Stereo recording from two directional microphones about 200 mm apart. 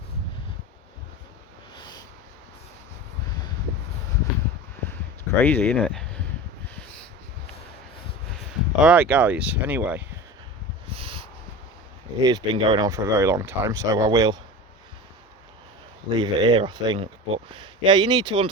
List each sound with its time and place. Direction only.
5.4 s speech: 10° left (ahead or behind)
8.8 s speech: 5° right (ahead or behind)
10.9 s snort: 25° right (ahead or behind)
12.2 s speech: 20° right (ahead or behind)
16.1 s speech: 20° right (ahead or behind)